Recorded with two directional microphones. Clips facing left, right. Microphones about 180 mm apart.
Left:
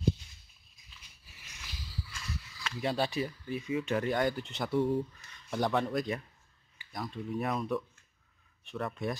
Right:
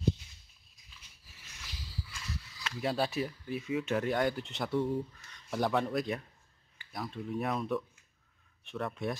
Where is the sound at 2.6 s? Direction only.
Centre (ahead or behind).